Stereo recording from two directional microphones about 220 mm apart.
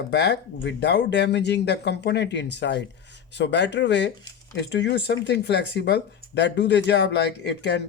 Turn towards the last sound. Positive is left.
turn(degrees=50)  # may be behind; listen again after turning